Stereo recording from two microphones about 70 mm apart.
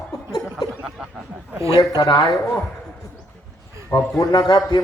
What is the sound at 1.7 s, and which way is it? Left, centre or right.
Speech, left.